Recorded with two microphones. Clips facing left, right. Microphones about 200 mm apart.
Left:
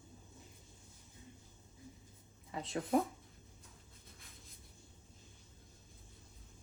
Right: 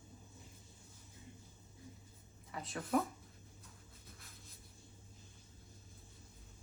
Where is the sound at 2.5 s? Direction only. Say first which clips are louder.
Left 3 dB; 25° left (ahead or behind).